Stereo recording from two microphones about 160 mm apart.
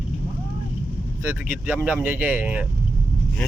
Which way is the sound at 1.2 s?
10° right (ahead or behind).